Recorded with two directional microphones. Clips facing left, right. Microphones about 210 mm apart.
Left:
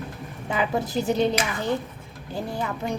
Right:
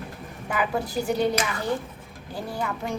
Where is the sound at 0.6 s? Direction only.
20° left (ahead or behind).